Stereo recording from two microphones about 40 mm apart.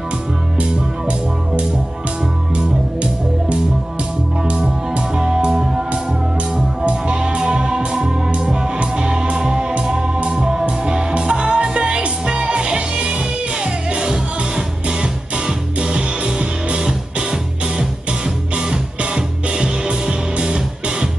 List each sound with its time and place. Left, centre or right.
2.5 s music: right
6.9 s music: right
14.9 s music: centre